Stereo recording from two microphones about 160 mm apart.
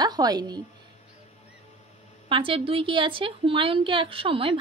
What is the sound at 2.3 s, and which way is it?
A woman's voice, 35° right (ahead or behind).